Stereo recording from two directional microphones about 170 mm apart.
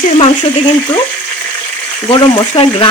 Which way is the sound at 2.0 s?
35° left (ahead or behind).